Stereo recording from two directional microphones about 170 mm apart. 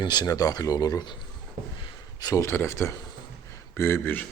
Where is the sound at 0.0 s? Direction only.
25° left (ahead or behind).